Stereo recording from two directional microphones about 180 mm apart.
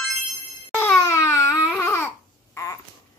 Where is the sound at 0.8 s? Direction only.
15° left (ahead or behind).